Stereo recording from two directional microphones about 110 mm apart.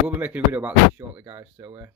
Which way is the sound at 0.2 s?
15° right (ahead or behind).